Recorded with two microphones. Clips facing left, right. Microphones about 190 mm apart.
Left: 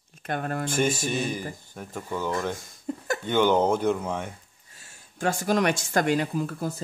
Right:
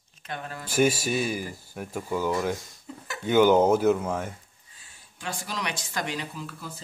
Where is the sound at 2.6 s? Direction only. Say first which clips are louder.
Left 9 dB; 50° left (ahead or behind).